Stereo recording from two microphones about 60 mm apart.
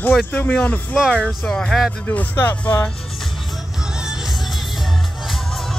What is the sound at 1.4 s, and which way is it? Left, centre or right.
Speech, centre.